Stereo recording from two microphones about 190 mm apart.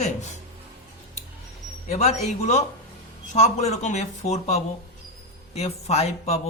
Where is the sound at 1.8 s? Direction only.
35° left (ahead or behind).